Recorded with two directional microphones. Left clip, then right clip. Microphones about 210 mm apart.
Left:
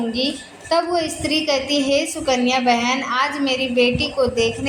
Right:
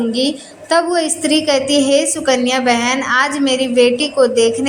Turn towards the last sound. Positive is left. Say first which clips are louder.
# right 6 dB
turn(degrees=-25)  # may be behind; listen again after turning